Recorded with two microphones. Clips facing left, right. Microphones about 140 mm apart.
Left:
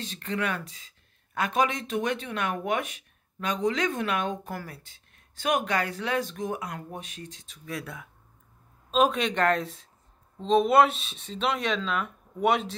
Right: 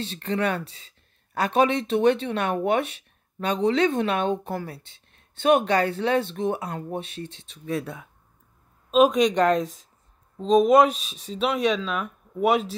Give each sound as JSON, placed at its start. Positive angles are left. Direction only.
{"t": 0.0, "sound": "speech", "side_deg": -30}
{"t": 8.9, "sound": "speech", "side_deg": -15}